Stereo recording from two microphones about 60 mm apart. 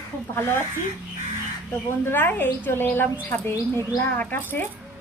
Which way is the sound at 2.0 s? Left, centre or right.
Left.